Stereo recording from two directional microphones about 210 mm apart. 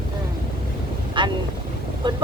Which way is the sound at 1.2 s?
25° right (ahead or behind).